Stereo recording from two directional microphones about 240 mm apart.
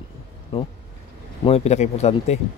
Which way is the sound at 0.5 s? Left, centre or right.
Left.